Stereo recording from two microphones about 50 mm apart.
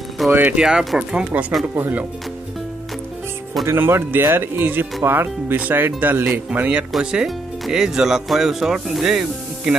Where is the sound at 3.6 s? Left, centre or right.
Right.